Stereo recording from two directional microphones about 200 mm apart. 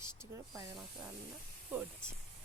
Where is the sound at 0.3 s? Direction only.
15° right (ahead or behind).